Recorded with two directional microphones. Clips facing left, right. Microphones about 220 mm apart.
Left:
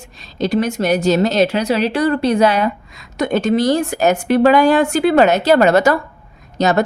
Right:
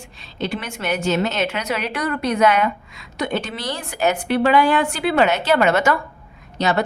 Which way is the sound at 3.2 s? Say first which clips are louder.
Left 9 dB; 45° left (ahead or behind).